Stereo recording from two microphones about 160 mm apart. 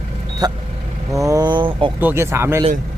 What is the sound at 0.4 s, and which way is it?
Speech, 25° right (ahead or behind).